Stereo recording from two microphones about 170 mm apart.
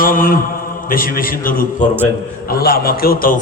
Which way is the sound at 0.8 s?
55° left (ahead or behind).